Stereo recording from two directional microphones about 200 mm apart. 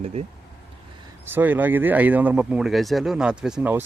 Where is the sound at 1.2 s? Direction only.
10° right (ahead or behind).